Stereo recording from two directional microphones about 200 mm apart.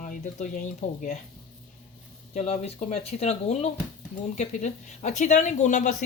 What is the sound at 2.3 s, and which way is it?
Speech, 30° left (ahead or behind).